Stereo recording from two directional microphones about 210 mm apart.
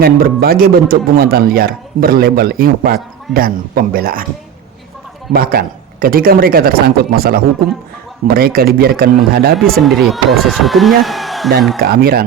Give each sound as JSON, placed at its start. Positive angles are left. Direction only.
{"t": 0.0, "sound": "a man's voice", "side_deg": -45}
{"t": 5.3, "sound": "a man's voice", "side_deg": -45}
{"t": 9.8, "sound": "speech", "side_deg": 0}
{"t": 11.8, "sound": "a man's voice", "side_deg": -45}